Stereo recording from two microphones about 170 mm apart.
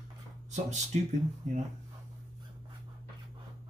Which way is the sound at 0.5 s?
40° right (ahead or behind).